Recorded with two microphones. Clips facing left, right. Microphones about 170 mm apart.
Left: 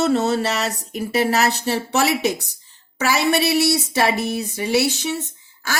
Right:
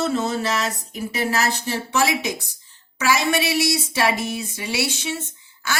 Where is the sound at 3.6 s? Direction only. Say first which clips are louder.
Left 3 dB; 40° left (ahead or behind).